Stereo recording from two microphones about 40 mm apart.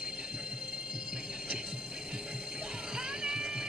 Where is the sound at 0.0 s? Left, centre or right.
Centre.